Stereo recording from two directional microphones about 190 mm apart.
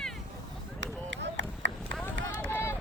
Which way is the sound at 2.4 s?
15° left (ahead or behind).